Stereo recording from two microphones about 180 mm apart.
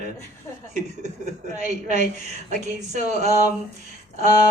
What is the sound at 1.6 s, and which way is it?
Speech, 40° right (ahead or behind).